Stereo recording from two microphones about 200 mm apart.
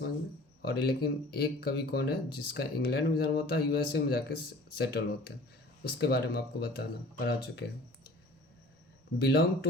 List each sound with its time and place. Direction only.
0.6 s speech: 50° left (ahead or behind)
9.1 s speech: 55° left (ahead or behind)